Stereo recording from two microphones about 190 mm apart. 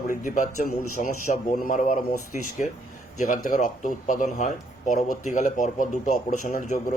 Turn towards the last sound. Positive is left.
turn(degrees=40)  # may be behind; listen again after turning